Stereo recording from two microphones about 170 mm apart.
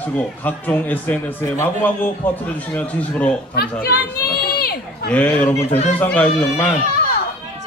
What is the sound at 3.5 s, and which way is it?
Speech, 65° left (ahead or behind).